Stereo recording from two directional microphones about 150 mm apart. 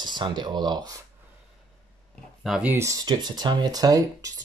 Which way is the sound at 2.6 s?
20° right (ahead or behind).